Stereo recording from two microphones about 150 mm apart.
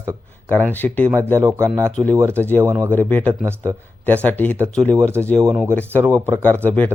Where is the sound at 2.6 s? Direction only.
15° right (ahead or behind).